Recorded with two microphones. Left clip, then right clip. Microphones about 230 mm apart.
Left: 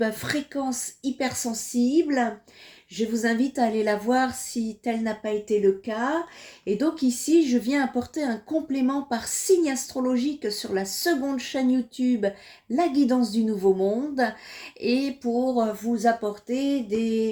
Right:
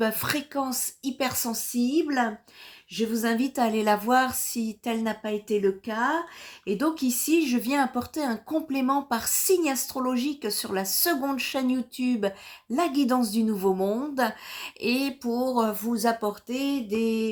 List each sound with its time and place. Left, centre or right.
0.0 s a woman's voice: right